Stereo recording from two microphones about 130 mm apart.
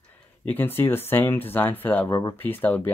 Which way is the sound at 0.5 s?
15° left (ahead or behind).